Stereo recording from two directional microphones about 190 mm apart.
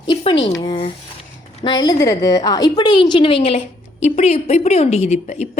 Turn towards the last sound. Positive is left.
turn(degrees=35)  # may be behind; listen again after turning